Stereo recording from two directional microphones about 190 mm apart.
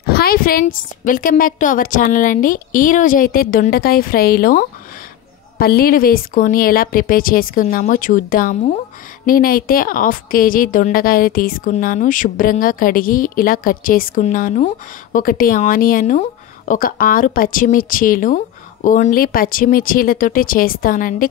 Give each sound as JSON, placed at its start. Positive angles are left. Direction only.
{"t": 0.0, "sound": "speech", "side_deg": 55}